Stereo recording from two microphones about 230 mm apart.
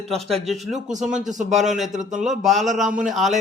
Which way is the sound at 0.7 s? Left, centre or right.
Right.